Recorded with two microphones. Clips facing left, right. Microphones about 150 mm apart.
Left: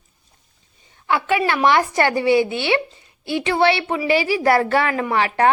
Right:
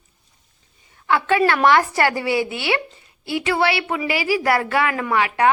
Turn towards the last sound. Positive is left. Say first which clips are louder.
# left 1 dB
turn(degrees=35)  # may be behind; listen again after turning